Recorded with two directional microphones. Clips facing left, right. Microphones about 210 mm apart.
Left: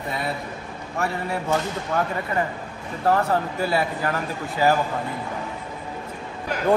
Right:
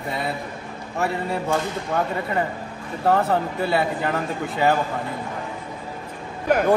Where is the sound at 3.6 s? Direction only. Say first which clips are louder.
Right 1 dB; 25° right (ahead or behind).